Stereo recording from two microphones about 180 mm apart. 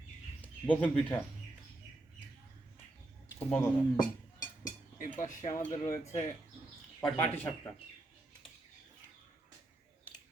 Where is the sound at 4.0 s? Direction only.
45° left (ahead or behind).